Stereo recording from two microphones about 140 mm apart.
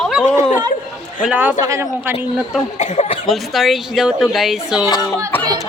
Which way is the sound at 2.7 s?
55° left (ahead or behind).